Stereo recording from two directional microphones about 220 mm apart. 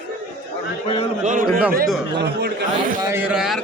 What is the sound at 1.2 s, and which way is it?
A man's voice, 35° right (ahead or behind).